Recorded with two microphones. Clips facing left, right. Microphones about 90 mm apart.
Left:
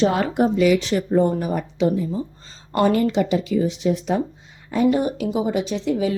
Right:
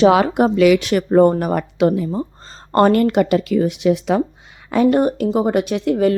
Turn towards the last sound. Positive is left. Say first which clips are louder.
# right 5 dB
turn(degrees=-60)  # may be behind; listen again after turning